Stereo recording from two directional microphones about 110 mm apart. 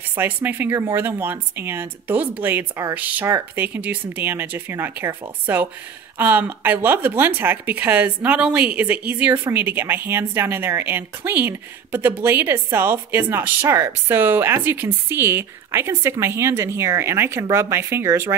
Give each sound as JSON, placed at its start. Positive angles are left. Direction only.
{"t": 0.1, "sound": "speech", "side_deg": -20}